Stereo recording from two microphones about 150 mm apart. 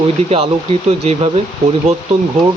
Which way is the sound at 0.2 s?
45° right (ahead or behind).